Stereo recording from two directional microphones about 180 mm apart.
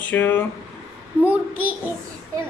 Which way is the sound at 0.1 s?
10° left (ahead or behind).